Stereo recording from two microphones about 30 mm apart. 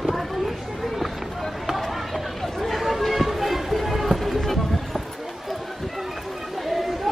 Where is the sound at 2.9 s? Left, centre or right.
Centre.